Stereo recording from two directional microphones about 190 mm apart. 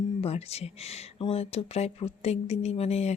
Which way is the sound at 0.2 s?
35° left (ahead or behind).